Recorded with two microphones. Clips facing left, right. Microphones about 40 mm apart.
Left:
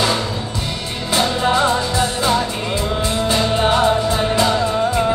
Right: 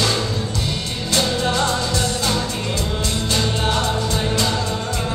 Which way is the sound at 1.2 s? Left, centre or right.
Centre.